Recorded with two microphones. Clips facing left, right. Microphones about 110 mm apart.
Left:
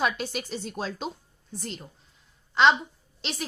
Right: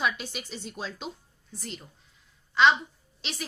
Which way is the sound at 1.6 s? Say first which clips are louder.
Left 3 dB; 30° left (ahead or behind).